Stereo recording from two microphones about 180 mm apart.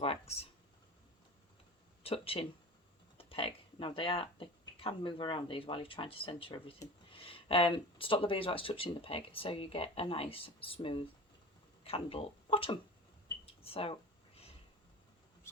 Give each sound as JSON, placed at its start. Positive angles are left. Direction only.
{"t": 0.0, "sound": "speech", "side_deg": 35}
{"t": 2.0, "sound": "speech", "side_deg": 30}
{"t": 13.4, "sound": "a sound", "side_deg": 35}